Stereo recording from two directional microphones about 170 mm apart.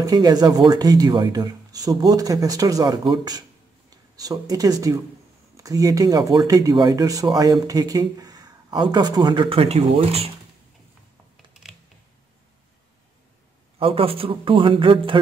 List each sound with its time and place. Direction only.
0.0 s speech: 20° right (ahead or behind)
13.7 s speech: 35° right (ahead or behind)